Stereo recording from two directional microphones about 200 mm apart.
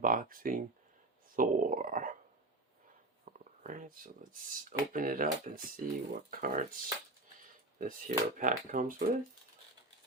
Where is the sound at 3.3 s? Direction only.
45° right (ahead or behind).